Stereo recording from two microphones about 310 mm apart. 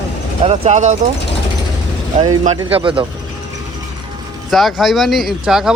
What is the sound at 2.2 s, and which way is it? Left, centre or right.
Speech, centre.